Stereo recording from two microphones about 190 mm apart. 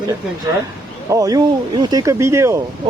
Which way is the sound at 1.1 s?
20° right (ahead or behind).